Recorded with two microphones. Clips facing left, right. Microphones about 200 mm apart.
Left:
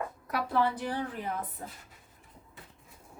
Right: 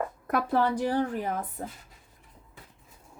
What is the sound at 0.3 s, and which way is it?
A woman's voice, 45° right (ahead or behind).